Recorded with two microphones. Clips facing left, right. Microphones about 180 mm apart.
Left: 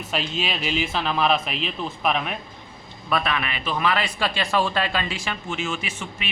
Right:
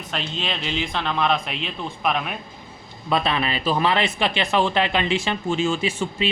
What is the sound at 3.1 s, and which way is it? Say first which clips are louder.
Speech: right 3 dB; 25° right (ahead or behind).